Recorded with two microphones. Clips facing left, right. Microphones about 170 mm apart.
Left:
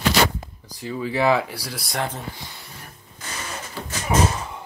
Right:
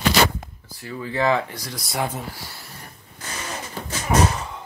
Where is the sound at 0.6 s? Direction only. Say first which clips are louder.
Left 4 dB; 15° left (ahead or behind).